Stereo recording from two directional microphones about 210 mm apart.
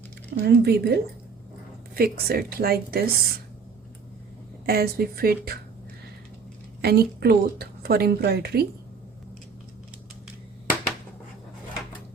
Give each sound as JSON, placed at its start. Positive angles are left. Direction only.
{"t": 0.4, "sound": "a woman's voice", "side_deg": -50}
{"t": 2.0, "sound": "a woman's voice", "side_deg": -45}
{"t": 4.6, "sound": "a woman's voice", "side_deg": -45}
{"t": 6.8, "sound": "a woman's voice", "side_deg": -50}